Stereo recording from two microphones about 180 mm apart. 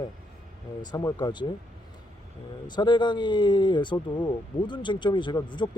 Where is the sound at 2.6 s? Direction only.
25° left (ahead or behind).